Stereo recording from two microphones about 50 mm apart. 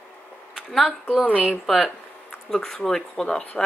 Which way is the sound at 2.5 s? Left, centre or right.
Centre.